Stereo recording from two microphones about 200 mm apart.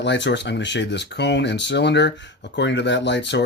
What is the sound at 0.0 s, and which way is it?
Speech, 60° left (ahead or behind).